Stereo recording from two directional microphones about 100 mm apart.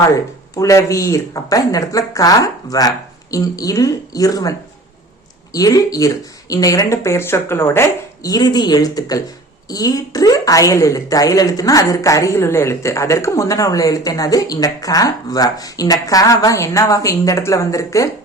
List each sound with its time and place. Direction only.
0.0 s a woman's voice: 30° left (ahead or behind)
5.5 s a woman's voice: 35° left (ahead or behind)
8.3 s a woman's voice: 45° left (ahead or behind)